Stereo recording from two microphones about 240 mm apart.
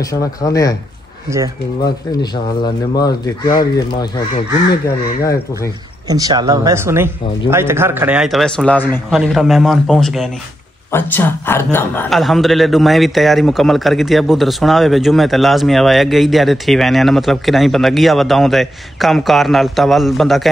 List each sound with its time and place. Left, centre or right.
0.0 s speech: centre
2.6 s speech: centre
6.0 s a man's voice: centre